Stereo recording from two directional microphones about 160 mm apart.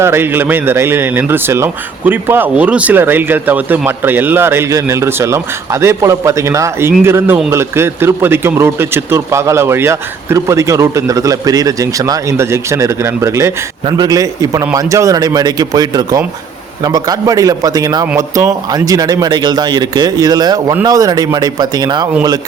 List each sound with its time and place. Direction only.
0.0 s a man's voice: 15° right (ahead or behind)